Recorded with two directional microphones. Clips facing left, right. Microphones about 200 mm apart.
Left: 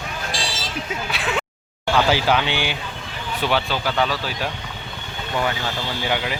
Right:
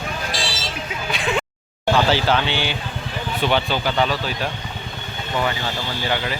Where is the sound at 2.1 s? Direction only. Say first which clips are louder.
Even; 10° left (ahead or behind).